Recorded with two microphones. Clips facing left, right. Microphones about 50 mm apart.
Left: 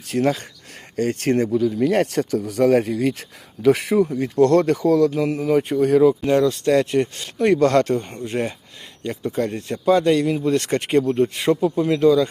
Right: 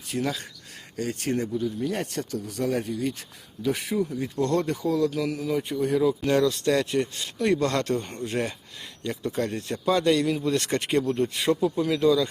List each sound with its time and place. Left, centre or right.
0.1 s speech: left
0.9 s speech: left
3.9 s speech: left
5.1 s speech: left
6.2 s speech: left
6.5 s speech: left
8.0 s speech: centre